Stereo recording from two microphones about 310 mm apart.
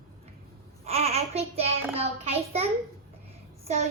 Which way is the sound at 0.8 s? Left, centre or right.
Centre.